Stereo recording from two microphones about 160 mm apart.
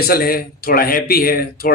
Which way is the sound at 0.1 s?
65° left (ahead or behind).